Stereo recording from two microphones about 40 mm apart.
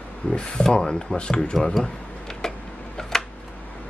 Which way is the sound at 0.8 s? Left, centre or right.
Centre.